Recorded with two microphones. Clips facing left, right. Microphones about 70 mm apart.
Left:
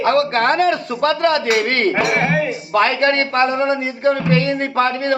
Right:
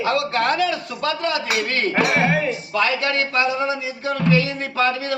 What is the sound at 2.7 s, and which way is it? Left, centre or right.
Speech, left.